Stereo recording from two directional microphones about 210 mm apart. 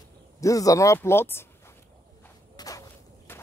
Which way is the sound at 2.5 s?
15° left (ahead or behind).